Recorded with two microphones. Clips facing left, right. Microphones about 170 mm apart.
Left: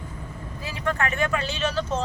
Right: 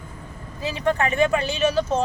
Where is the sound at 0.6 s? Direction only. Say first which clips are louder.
Right 5 dB; 25° right (ahead or behind).